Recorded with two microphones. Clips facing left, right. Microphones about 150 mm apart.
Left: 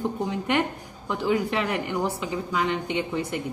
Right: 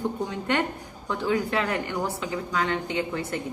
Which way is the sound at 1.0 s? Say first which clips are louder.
Left 1 dB; 15° left (ahead or behind).